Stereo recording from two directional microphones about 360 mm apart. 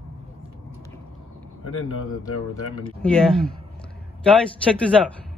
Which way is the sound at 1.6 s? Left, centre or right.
Left.